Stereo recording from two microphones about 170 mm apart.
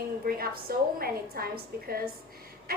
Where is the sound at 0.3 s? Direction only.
60° right (ahead or behind).